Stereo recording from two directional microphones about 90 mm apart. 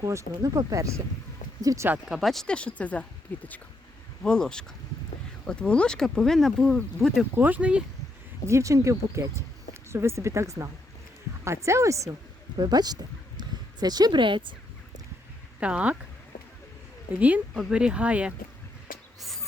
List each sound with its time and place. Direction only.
0.0 s speech: 35° right (ahead or behind)
2.0 s speech: centre (ahead or behind)
7.3 s speech: 20° right (ahead or behind)
8.4 s speech: 35° right (ahead or behind)
12.5 s speech: 50° right (ahead or behind); by 14.5 s 65° right (ahead or behind)
15.6 s speech: 15° right (ahead or behind)
17.2 s speech: 15° right (ahead or behind)
17.5 s speech: 5° right (ahead or behind)